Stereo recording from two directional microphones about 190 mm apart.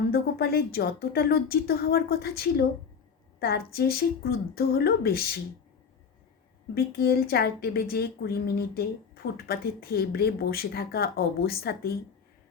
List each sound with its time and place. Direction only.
0.1 s a woman's voice: 55° left (ahead or behind)
6.7 s a woman's voice: 55° left (ahead or behind)